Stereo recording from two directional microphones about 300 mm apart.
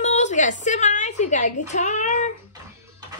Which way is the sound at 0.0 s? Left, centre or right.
Left.